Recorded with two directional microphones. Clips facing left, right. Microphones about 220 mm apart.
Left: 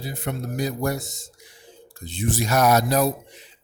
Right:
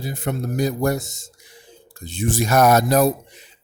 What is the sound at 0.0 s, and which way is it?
Speech, 45° right (ahead or behind).